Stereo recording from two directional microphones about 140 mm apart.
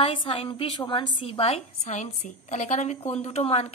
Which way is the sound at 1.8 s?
60° left (ahead or behind).